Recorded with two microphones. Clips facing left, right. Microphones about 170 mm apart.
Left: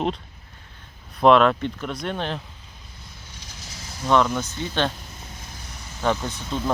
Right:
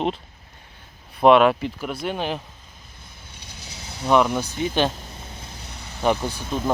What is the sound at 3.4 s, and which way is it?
Vehicle, 65° right (ahead or behind).